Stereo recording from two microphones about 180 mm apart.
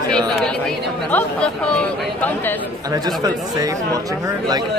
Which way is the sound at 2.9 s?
20° right (ahead or behind).